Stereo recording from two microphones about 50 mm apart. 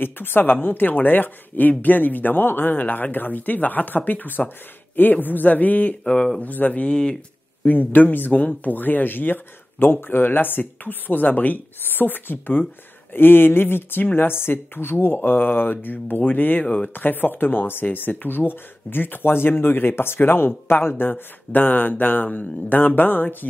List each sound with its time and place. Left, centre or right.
0.0 s speech: left
6.0 s speech: centre
6.4 s speech: left; by 7.2 s centre
7.6 s speech: left
16.6 s speech: left
16.9 s speech: left
21.0 s speech: left